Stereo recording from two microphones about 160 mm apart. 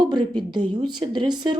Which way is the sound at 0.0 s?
30° right (ahead or behind).